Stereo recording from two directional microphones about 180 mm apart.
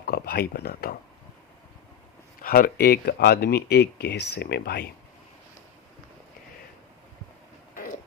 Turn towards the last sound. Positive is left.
turn(degrees=50)  # may be behind; listen again after turning